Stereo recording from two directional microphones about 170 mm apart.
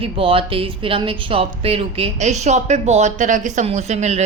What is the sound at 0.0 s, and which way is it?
Speech, 30° right (ahead or behind).